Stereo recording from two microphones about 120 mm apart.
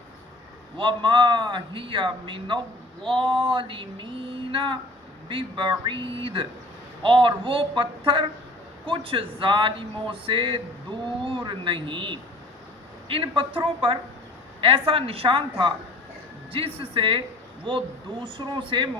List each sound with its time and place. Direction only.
0.8 s a man's voice: 45° right (ahead or behind)